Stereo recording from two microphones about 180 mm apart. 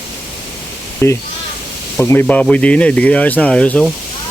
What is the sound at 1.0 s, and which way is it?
Speech, 15° left (ahead or behind).